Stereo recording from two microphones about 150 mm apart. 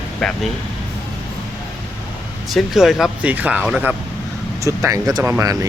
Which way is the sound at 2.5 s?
Centre (ahead or behind).